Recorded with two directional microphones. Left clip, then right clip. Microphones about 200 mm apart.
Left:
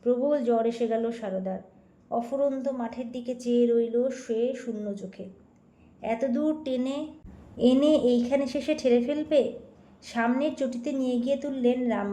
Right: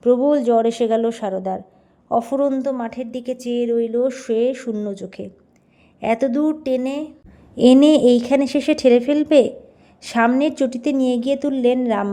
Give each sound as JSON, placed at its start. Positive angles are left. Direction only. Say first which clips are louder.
{"t": 0.0, "sound": "speech", "louder": "right 9 dB", "side_deg": -25}
{"t": 2.0, "sound": "a woman's voice", "louder": "right 8 dB", "side_deg": -35}